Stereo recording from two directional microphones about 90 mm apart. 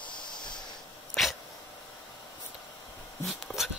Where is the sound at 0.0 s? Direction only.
60° left (ahead or behind).